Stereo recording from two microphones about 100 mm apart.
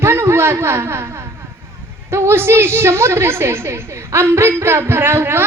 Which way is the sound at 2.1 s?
25° right (ahead or behind).